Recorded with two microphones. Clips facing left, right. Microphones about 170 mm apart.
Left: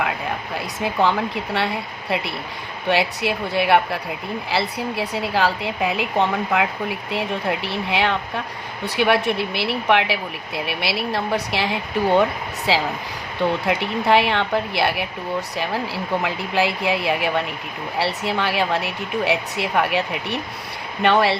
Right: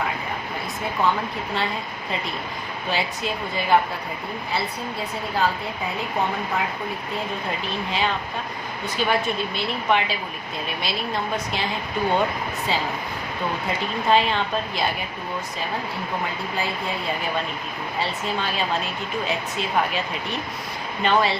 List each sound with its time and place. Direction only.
1.0 s a woman's voice: 85° left
1.5 s a woman's voice: 70° left (ahead or behind)